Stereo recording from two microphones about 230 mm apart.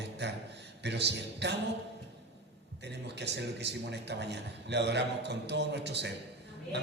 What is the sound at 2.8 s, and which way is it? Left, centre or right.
A man's voice, right.